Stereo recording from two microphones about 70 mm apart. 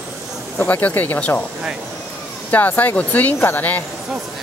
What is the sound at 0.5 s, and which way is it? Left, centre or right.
Speech, left.